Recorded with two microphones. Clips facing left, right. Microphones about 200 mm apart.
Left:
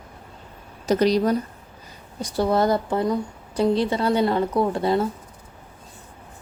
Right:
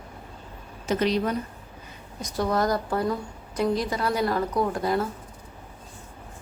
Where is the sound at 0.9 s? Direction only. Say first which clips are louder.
Left 5 dB; 40° left (ahead or behind).